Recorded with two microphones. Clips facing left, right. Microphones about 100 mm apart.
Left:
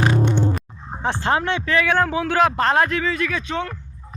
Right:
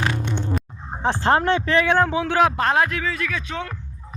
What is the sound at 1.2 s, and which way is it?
A man's voice, 40° right (ahead or behind).